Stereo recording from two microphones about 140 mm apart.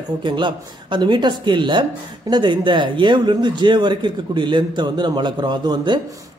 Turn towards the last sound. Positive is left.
turn(degrees=-30)  # may be behind; listen again after turning